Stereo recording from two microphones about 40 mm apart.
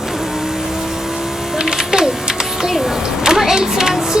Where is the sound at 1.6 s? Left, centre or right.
Centre.